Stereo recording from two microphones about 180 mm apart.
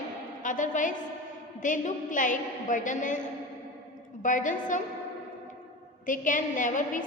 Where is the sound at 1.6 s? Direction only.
45° left (ahead or behind).